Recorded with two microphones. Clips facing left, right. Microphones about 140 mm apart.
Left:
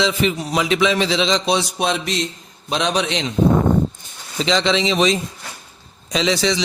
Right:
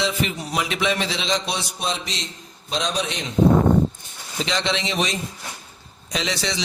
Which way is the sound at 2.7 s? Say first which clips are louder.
Left 5 dB; 70° left (ahead or behind).